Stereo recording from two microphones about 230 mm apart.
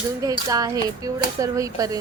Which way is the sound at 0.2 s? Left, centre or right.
Centre.